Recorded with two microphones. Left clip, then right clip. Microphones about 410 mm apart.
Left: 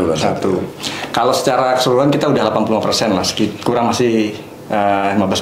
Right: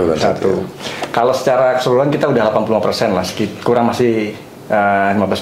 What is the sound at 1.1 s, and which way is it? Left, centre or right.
Speech, right.